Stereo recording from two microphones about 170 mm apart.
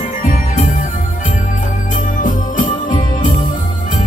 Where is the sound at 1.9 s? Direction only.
50° left (ahead or behind).